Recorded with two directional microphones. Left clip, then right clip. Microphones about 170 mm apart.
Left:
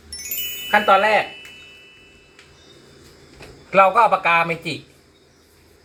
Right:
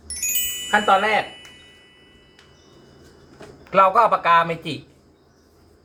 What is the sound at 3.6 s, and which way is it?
A man's voice, 20° right (ahead or behind).